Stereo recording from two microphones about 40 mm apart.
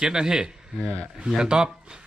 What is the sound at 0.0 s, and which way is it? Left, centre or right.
Speech, centre.